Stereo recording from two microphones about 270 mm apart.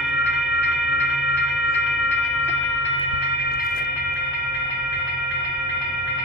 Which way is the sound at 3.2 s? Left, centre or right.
Left.